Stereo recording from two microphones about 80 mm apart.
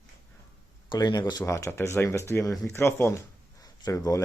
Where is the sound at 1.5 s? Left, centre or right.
Left.